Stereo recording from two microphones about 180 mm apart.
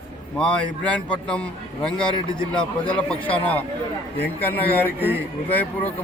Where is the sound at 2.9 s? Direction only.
10° left (ahead or behind).